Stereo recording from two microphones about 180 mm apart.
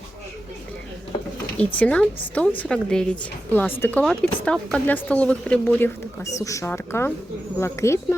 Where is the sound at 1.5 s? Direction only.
5° left (ahead or behind).